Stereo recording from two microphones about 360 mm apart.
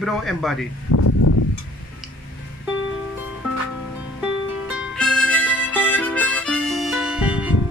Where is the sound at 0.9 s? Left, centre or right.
Left.